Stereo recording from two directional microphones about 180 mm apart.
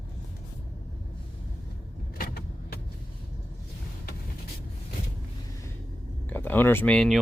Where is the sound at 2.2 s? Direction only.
60° left (ahead or behind).